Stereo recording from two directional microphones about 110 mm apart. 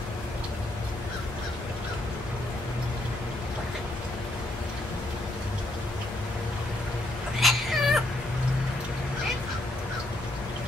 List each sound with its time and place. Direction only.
7.3 s baby cry: centre (ahead or behind)